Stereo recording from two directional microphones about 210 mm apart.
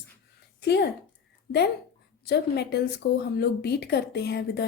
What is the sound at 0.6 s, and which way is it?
Speech, 50° left (ahead or behind).